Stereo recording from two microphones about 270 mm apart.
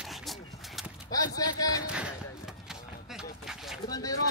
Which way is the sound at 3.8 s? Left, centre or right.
Centre.